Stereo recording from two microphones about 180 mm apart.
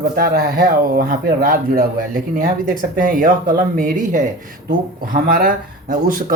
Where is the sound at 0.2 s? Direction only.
50° right (ahead or behind).